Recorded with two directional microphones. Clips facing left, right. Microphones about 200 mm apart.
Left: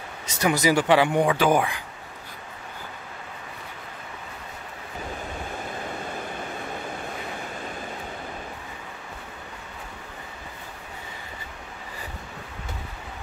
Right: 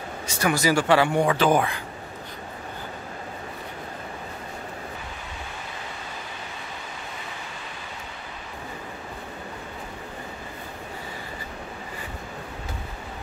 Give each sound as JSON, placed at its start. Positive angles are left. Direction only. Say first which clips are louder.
{"t": 0.4, "sound": "speech", "louder": "left 1 dB", "side_deg": 20}